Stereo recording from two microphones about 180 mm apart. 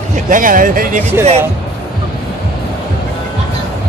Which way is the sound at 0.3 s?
50° right (ahead or behind).